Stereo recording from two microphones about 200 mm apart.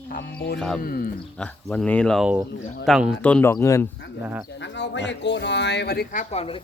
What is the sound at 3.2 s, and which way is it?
Speech, 10° left (ahead or behind).